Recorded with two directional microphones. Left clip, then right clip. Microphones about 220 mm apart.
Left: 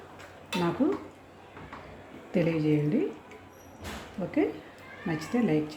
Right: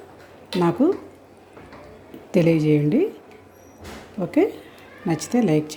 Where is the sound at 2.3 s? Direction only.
35° right (ahead or behind).